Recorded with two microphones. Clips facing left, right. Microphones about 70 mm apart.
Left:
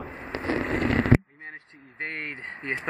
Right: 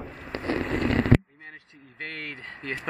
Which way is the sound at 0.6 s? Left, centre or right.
Left.